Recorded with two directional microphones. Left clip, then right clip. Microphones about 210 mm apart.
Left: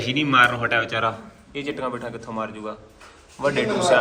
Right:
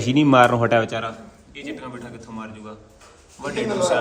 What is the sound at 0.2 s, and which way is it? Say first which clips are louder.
Speech: right 3 dB; 30° right (ahead or behind).